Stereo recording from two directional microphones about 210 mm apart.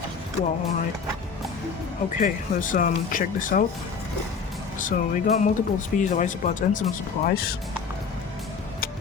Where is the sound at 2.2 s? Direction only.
40° left (ahead or behind).